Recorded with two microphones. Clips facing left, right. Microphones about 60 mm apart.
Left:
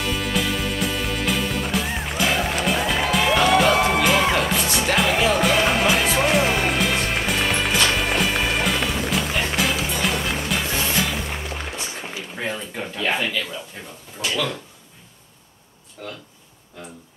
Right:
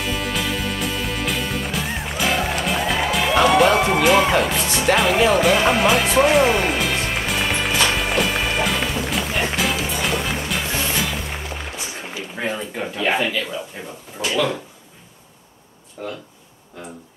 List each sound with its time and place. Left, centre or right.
0.0 s music: centre
12.4 s a man's voice: centre
16.0 s a man's voice: centre